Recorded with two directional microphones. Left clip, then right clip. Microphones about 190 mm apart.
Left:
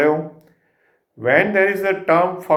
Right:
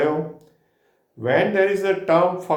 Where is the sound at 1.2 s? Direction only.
25° left (ahead or behind).